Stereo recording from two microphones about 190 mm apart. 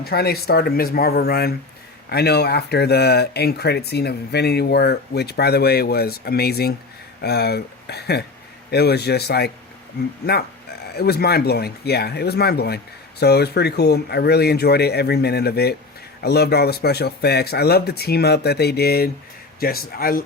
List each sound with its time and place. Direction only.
0.0 s speech: 55° left (ahead or behind)